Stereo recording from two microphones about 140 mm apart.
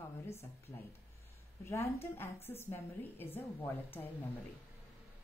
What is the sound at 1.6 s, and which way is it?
A woman's voice, 20° left (ahead or behind).